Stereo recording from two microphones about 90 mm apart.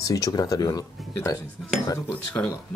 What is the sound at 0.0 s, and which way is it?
Speech, 40° left (ahead or behind).